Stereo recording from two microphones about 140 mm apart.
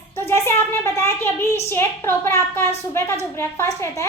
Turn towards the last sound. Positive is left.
turn(degrees=20)  # may be behind; listen again after turning